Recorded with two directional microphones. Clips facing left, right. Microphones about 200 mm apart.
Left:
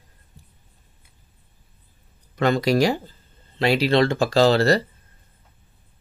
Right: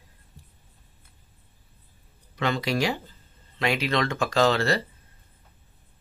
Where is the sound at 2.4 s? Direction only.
40° left (ahead or behind).